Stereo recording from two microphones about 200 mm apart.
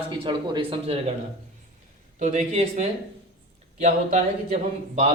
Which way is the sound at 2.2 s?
35° right (ahead or behind).